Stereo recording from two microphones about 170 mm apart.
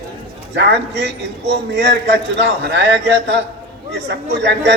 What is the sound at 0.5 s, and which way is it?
A man's voice, 90° right.